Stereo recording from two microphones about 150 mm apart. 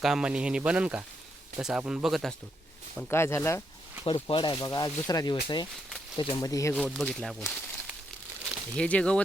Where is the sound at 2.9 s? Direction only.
15° left (ahead or behind).